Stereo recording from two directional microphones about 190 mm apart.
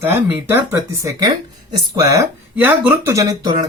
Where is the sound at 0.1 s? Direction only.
10° right (ahead or behind).